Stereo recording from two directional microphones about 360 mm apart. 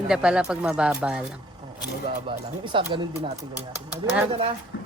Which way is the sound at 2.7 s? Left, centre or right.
Centre.